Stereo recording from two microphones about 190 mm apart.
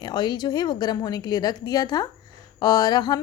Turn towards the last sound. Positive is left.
turn(degrees=20)  # may be behind; listen again after turning